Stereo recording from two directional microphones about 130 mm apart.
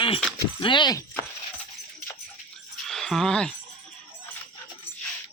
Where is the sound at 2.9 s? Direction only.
5° left (ahead or behind).